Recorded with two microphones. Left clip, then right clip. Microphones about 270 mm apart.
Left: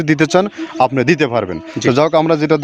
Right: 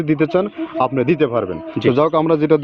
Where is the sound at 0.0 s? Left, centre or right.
Left.